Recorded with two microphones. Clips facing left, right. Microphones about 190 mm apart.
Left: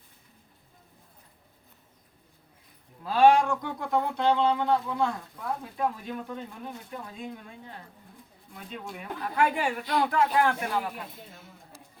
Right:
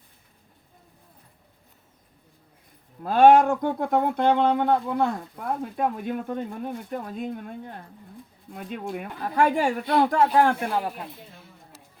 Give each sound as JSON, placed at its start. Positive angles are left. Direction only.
{"t": 3.0, "sound": "speech", "side_deg": -50}
{"t": 8.9, "sound": "speech", "side_deg": -45}